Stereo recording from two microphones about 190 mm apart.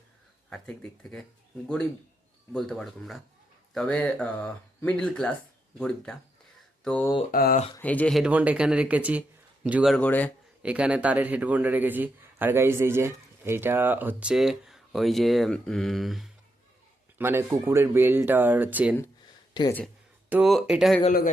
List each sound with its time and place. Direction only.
0.5 s speech: 5° left (ahead or behind)
6.8 s speech: 5° left (ahead or behind)
7.3 s speech: 50° left (ahead or behind)
7.8 s speech: 10° left (ahead or behind)
10.6 s speech: 5° right (ahead or behind)
17.2 s speech: 10° right (ahead or behind)
20.3 s speech: centre (ahead or behind)